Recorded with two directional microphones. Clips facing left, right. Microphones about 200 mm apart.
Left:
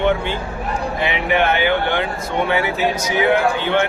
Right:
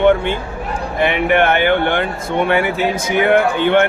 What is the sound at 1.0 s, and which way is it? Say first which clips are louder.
Speech: right 5 dB; 55° right (ahead or behind).